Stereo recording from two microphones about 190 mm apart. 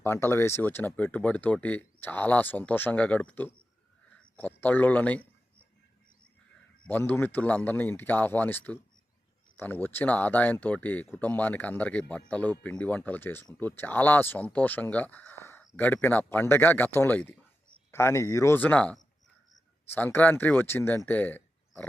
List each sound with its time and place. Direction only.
0.0 s speech: 15° left (ahead or behind)
6.8 s speech: 10° left (ahead or behind)